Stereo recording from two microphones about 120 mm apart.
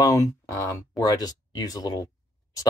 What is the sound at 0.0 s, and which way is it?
Speech, 25° left (ahead or behind).